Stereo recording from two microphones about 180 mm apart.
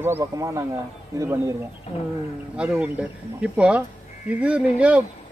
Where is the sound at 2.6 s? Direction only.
5° right (ahead or behind).